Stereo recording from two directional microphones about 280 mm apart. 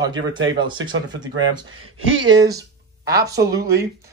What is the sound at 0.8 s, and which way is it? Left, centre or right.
Speech, right.